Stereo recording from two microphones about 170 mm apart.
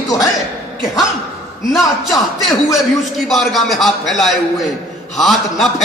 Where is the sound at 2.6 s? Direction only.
Centre (ahead or behind).